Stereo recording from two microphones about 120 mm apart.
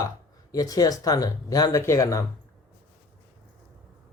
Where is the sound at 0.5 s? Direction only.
30° left (ahead or behind).